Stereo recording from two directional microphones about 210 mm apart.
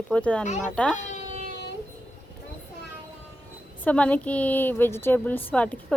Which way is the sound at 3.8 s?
5° left (ahead or behind).